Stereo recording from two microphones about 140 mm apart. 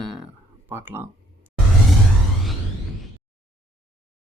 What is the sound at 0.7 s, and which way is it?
Speech, 15° right (ahead or behind).